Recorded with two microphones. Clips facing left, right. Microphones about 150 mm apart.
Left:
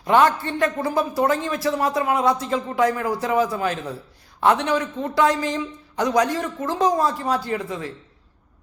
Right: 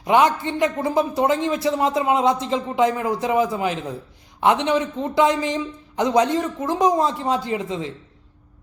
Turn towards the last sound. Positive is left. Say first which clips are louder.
# right 2 dB
turn(degrees=-20)  # may be behind; listen again after turning